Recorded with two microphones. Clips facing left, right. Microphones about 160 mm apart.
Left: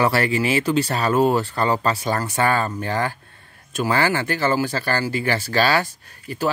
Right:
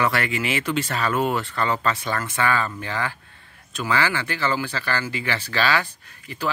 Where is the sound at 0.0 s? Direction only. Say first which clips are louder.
Left 4 dB; 35° left (ahead or behind).